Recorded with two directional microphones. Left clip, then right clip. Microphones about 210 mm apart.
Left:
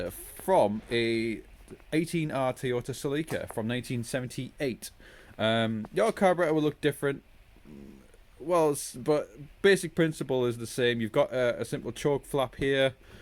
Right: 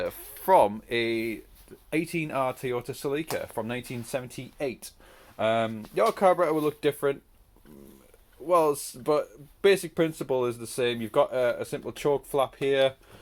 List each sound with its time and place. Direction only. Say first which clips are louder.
0.0 s speech: right 4 dB; 5° left (ahead or behind)
8.4 s speech: right 3 dB; 15° left (ahead or behind)